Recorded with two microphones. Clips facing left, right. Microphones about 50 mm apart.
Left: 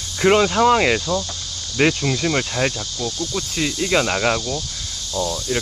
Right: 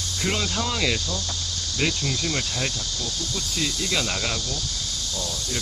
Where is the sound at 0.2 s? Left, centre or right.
Left.